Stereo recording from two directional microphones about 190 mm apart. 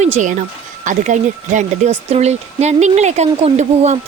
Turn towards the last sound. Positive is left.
turn(degrees=-35)  # may be behind; listen again after turning